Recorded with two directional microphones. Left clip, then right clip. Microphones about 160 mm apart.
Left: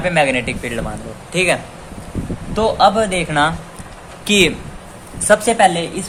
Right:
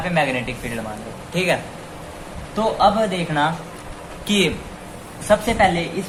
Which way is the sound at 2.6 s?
90° left.